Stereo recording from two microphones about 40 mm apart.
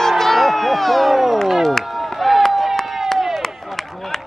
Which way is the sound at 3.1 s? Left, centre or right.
Centre.